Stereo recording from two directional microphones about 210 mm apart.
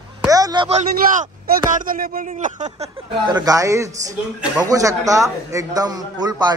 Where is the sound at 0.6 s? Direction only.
35° right (ahead or behind).